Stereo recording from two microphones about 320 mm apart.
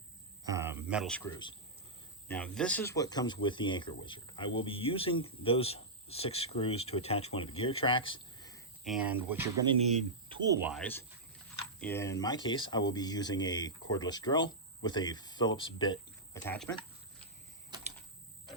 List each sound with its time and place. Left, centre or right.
0.4 s speech: centre
8.8 s speech: centre